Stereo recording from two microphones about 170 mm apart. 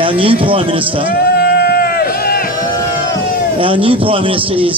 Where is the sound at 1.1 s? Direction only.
70° left (ahead or behind).